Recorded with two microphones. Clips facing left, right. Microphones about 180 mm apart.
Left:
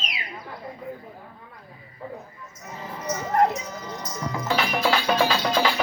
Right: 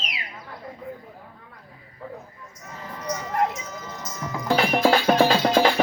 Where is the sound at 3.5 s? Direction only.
Centre (ahead or behind).